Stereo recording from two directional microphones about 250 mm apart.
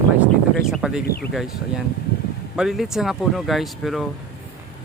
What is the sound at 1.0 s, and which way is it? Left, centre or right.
Speech, left.